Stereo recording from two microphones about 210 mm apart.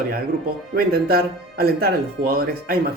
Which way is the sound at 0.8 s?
45° right (ahead or behind).